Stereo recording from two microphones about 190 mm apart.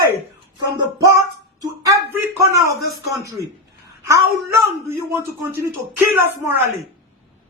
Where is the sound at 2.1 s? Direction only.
10° right (ahead or behind).